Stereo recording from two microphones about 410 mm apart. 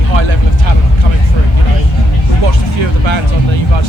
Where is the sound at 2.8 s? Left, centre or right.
Right.